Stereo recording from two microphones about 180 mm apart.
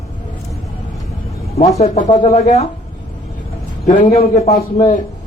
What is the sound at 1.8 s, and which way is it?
Speech, 40° left (ahead or behind).